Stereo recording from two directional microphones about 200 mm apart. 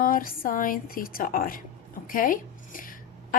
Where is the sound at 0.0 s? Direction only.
45° left (ahead or behind).